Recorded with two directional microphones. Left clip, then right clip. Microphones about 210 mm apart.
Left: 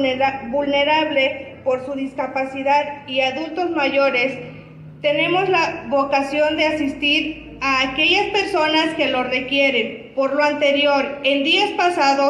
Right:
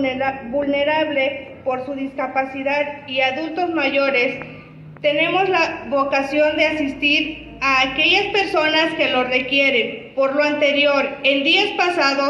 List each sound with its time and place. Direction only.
0.0 s a woman's voice: 60° left (ahead or behind)
6.7 s a woman's voice: centre (ahead or behind)
7.6 s a woman's voice: 55° left (ahead or behind)